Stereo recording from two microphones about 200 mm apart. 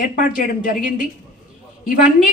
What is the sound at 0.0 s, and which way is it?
Speech, 40° left (ahead or behind).